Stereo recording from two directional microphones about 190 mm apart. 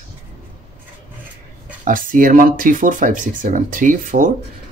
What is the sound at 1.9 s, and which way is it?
Speech, 45° right (ahead or behind).